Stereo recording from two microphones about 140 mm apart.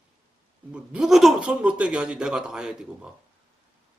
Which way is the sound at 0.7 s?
5° right (ahead or behind).